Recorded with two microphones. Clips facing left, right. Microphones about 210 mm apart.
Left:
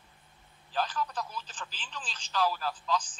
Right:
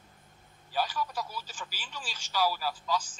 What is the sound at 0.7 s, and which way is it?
Speech, 10° right (ahead or behind).